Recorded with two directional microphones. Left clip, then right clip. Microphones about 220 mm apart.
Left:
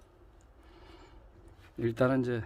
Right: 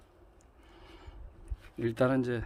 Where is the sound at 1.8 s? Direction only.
5° left (ahead or behind).